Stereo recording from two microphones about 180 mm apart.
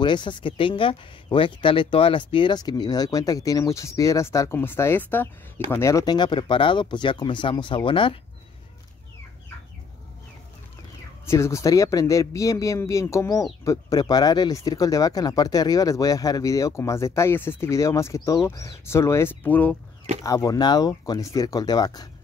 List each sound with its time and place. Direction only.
0.0 s speech: 25° left (ahead or behind)
11.2 s speech: 15° left (ahead or behind)
20.2 s speech: 20° left (ahead or behind)